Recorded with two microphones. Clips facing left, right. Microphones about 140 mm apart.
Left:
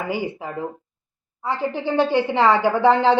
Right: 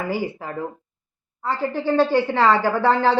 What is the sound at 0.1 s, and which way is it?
A woman's voice, 15° left (ahead or behind).